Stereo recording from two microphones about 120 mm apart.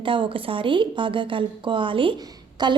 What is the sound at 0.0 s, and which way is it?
A woman's voice, 45° right (ahead or behind).